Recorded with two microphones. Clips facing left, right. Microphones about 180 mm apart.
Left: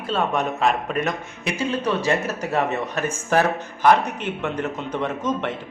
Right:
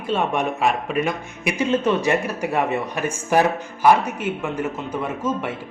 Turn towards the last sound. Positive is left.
turn(degrees=-5)  # may be behind; listen again after turning